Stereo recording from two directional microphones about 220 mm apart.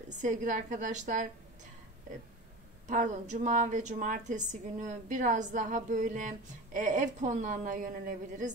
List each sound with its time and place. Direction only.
0.1 s a woman's voice: 35° right (ahead or behind)
2.9 s a woman's voice: 35° right (ahead or behind)